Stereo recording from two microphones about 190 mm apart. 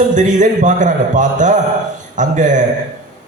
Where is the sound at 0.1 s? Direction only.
40° right (ahead or behind).